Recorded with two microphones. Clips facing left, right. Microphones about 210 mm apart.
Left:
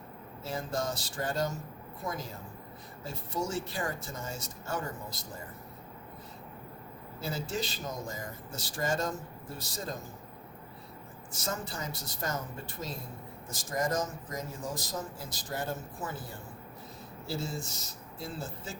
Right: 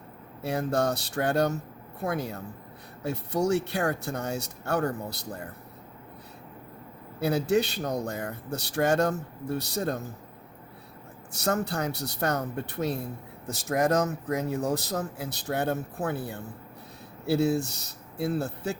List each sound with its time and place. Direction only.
0.4 s speech: 65° right (ahead or behind)
7.2 s speech: 65° right (ahead or behind)
11.3 s speech: 65° right (ahead or behind)